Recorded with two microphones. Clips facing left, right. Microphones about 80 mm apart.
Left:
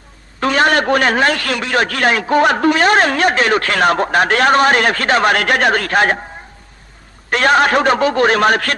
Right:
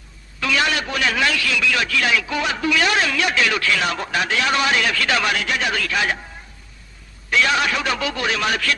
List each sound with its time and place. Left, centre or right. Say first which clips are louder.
0.3 s a man's voice: left 7 dB; left
7.3 s a man's voice: left 7 dB; left